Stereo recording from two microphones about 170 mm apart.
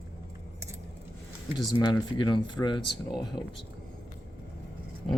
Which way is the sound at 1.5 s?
25° left (ahead or behind).